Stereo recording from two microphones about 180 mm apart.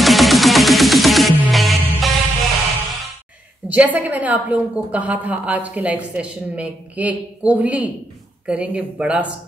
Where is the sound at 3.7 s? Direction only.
10° right (ahead or behind).